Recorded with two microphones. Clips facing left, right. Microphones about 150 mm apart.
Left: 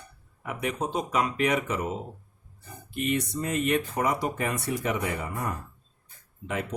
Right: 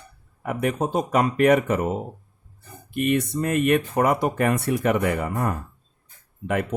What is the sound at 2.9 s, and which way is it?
Speech, 60° right (ahead or behind).